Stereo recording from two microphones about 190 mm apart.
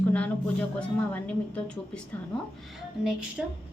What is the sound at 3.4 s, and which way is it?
Speech, centre (ahead or behind).